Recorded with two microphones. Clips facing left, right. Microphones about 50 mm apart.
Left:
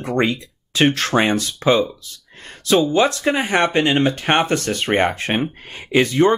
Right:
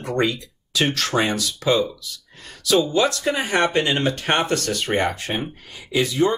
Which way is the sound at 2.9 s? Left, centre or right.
Left.